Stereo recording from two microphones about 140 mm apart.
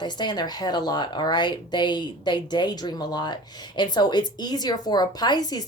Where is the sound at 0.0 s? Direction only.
30° left (ahead or behind).